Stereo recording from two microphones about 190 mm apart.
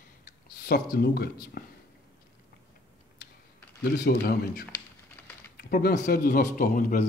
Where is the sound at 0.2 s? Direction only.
50° left (ahead or behind).